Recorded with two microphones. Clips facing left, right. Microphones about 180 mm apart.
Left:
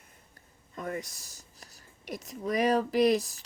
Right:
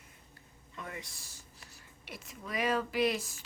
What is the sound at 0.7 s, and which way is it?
Speech, 45° left (ahead or behind).